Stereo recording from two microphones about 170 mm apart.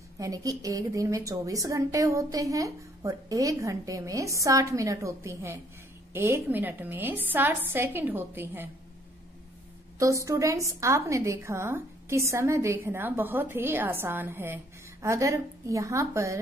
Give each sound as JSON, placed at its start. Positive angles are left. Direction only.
{"t": 0.2, "sound": "a woman's voice", "side_deg": -20}
{"t": 9.9, "sound": "a woman's voice", "side_deg": -20}